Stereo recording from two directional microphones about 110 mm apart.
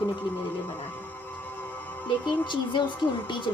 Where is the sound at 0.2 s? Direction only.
15° left (ahead or behind).